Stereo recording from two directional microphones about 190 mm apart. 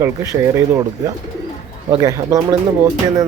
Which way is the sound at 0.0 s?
15° right (ahead or behind).